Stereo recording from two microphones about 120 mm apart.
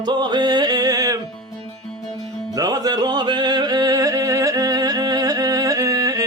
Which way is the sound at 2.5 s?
30° right (ahead or behind).